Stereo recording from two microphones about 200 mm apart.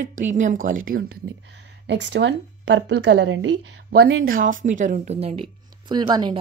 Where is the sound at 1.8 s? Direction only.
60° right (ahead or behind).